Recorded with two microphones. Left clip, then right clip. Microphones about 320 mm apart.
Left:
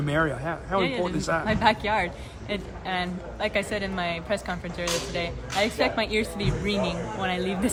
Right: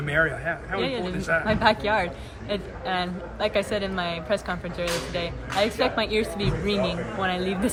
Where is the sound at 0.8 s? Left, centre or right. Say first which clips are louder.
Left 1 dB; centre.